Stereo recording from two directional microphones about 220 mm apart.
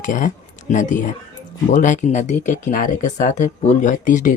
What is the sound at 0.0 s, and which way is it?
Speech, 35° left (ahead or behind).